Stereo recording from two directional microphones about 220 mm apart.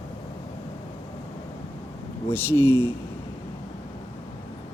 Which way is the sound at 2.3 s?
10° left (ahead or behind).